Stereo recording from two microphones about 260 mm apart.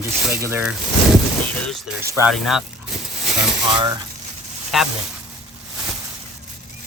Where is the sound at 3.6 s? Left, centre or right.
Centre.